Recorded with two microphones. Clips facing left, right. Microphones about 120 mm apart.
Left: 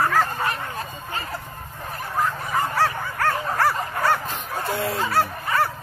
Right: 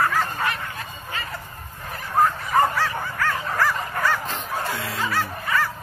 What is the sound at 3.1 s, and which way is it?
Bow-wow, 40° left (ahead or behind).